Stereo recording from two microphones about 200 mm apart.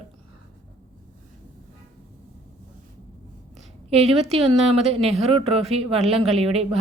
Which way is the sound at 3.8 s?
30° right (ahead or behind).